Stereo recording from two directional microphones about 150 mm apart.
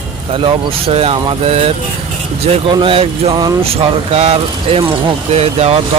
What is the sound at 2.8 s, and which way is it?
Speech, 35° right (ahead or behind).